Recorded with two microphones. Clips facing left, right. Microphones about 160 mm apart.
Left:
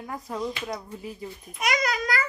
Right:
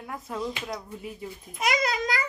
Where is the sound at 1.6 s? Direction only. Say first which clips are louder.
Even; 25° right (ahead or behind).